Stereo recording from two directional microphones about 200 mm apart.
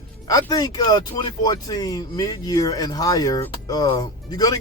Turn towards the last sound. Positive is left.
turn(degrees=20)  # may be behind; listen again after turning